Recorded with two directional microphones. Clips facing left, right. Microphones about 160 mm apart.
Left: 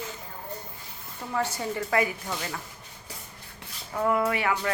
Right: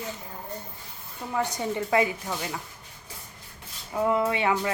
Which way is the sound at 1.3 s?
15° right (ahead or behind).